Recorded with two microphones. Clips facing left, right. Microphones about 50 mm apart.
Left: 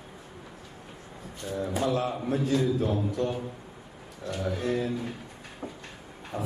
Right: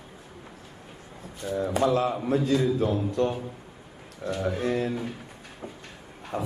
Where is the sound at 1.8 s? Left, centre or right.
Right.